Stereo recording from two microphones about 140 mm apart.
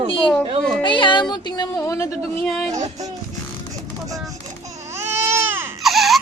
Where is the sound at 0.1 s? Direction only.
40° left (ahead or behind).